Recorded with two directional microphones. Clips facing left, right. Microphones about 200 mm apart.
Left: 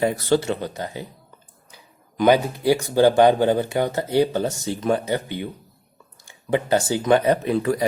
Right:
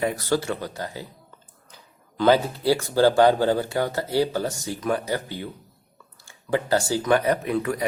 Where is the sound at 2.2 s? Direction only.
15° left (ahead or behind).